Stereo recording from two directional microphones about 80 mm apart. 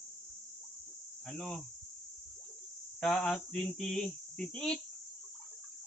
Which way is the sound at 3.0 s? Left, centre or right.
Centre.